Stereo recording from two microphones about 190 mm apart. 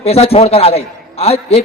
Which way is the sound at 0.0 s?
30° left (ahead or behind).